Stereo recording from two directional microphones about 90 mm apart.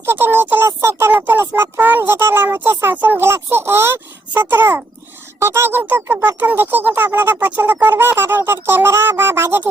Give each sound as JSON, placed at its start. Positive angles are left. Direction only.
{"t": 0.0, "sound": "speech", "side_deg": -25}